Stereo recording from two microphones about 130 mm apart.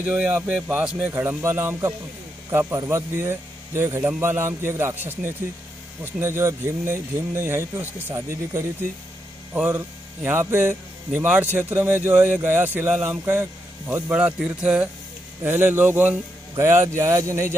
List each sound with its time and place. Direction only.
0.0 s speech: 10° right (ahead or behind)
9.5 s hum: 15° right (ahead or behind)
11.1 s speech: 10° right (ahead or behind)